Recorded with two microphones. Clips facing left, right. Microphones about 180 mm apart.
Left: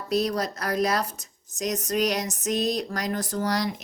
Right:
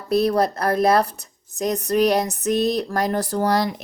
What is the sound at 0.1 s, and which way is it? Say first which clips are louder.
Speech: right 7 dB; 55° right (ahead or behind).